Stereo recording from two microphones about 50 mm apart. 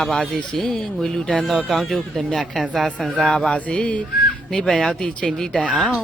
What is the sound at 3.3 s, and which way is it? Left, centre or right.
Speech, centre.